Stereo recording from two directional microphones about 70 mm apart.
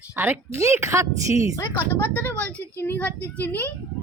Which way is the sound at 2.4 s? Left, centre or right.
Centre.